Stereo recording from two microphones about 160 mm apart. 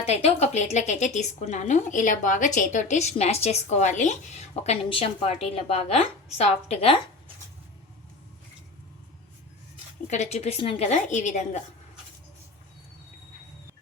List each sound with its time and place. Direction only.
0.0 s speech: 40° left (ahead or behind)
10.1 s speech: 45° left (ahead or behind)